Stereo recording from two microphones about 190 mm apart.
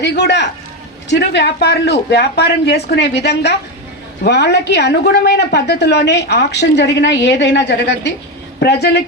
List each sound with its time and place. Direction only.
0.0 s a woman's voice: 60° left (ahead or behind)